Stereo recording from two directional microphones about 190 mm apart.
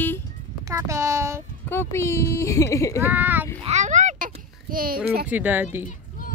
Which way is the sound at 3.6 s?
35° right (ahead or behind).